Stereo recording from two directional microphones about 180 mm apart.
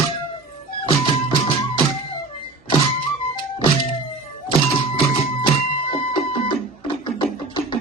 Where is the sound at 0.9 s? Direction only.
30° left (ahead or behind).